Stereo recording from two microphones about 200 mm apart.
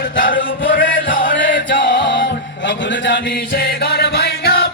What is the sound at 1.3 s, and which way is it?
Music, 60° left (ahead or behind).